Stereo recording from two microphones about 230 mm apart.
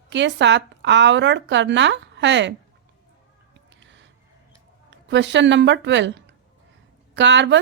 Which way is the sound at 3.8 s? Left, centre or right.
Right.